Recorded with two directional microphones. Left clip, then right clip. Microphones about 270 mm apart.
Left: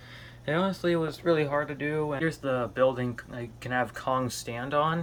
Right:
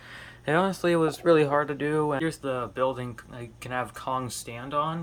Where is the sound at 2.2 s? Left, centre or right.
Centre.